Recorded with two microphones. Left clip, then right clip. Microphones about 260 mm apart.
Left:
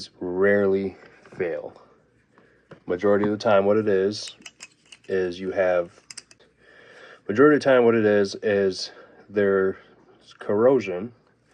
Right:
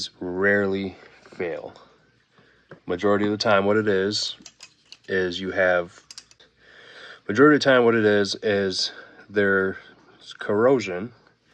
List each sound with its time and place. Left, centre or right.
0.0 s speech: right
2.8 s speech: right
6.7 s a sound: centre
7.3 s speech: right